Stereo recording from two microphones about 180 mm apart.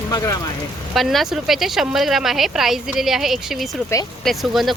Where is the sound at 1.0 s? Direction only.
Centre (ahead or behind).